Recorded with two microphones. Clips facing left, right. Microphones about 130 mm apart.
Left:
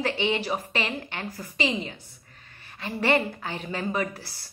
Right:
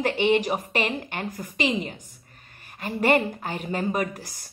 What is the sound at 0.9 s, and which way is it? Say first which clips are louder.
A woman's voice: right 3 dB; 45° right (ahead or behind).